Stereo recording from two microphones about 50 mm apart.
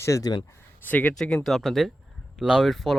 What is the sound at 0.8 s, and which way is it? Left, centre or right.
Speech, left.